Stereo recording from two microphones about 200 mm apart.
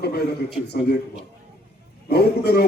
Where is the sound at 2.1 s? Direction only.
55° left (ahead or behind).